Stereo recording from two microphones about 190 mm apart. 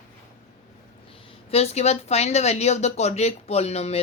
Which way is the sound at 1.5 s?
35° left (ahead or behind).